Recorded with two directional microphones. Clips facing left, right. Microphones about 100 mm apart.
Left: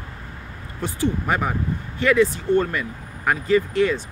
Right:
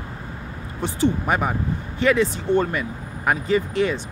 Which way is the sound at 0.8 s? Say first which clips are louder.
Right 2 dB; 20° right (ahead or behind).